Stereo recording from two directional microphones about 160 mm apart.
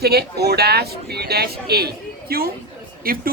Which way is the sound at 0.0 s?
80° right.